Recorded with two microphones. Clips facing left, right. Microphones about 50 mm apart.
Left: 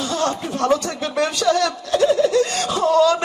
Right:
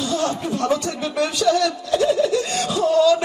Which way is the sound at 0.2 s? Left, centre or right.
Left.